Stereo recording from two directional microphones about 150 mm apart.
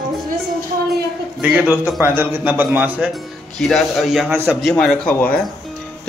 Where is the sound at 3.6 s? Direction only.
Centre (ahead or behind).